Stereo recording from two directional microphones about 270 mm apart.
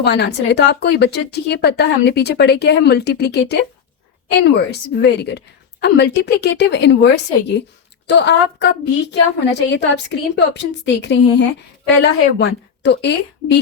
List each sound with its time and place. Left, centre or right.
0.0 s a woman's voice: left